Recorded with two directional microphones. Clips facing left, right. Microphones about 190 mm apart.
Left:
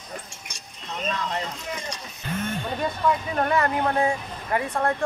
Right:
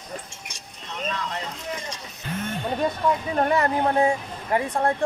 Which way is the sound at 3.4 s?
25° right (ahead or behind).